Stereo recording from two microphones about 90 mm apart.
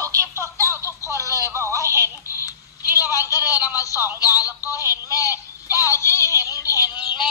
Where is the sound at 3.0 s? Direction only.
40° left (ahead or behind).